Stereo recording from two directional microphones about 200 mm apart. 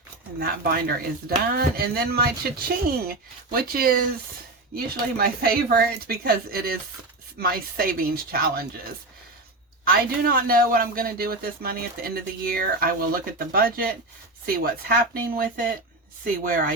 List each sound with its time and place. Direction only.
0.3 s speech: 50° right (ahead or behind)
5.1 s speech: 50° right (ahead or behind)
9.8 s speech: 45° right (ahead or behind)